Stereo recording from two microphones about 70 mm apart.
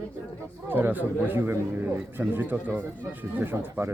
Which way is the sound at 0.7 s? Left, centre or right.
Right.